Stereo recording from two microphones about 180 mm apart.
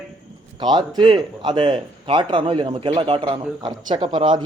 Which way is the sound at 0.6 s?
25° right (ahead or behind).